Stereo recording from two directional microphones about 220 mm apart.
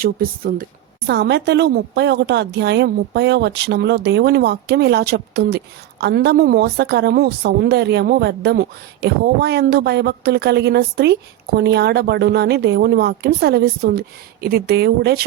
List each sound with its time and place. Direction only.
0.0 s a woman's voice: 40° right (ahead or behind)